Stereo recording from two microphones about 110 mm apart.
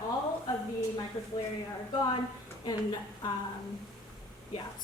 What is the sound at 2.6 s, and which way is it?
Speech, 40° left (ahead or behind).